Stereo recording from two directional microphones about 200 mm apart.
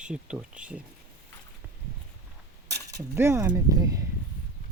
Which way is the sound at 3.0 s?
10° right (ahead or behind).